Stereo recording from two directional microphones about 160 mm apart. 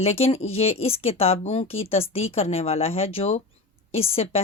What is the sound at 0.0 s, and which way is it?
A woman's voice, 40° left (ahead or behind).